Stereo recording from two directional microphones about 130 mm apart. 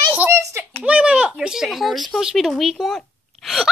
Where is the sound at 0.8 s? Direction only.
10° right (ahead or behind).